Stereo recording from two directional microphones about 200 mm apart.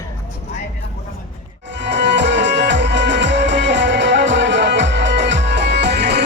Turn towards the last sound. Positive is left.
turn(degrees=-55)  # may be behind; listen again after turning